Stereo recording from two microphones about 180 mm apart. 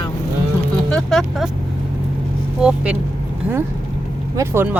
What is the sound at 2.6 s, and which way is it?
Speech, 5° right (ahead or behind).